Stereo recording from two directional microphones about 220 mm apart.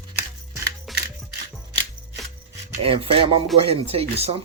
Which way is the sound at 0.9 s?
Centre (ahead or behind).